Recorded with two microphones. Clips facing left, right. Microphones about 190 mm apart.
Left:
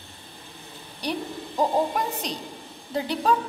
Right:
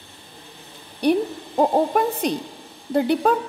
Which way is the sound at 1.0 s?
55° right (ahead or behind).